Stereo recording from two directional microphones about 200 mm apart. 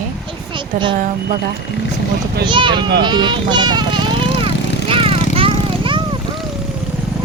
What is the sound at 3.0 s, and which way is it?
A child's voice, 20° right (ahead or behind).